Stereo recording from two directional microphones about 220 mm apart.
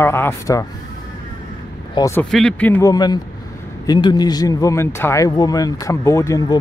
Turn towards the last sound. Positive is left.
turn(degrees=15)  # may be behind; listen again after turning